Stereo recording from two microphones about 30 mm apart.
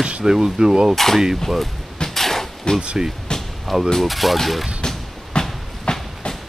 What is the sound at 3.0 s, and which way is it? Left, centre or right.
Speech, centre.